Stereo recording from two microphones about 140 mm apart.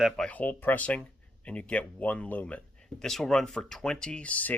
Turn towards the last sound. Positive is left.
turn(degrees=10)  # may be behind; listen again after turning